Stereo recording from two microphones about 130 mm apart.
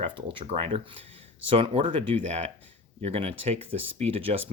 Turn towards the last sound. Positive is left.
turn(degrees=-45)  # may be behind; listen again after turning